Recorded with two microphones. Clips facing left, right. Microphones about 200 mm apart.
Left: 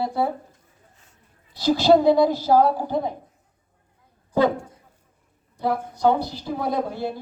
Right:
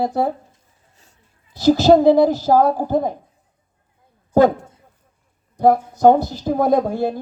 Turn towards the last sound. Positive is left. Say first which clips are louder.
# right 8 dB
turn(degrees=-50)  # may be behind; listen again after turning